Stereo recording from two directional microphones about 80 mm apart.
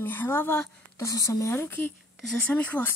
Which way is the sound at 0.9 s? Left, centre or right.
Left.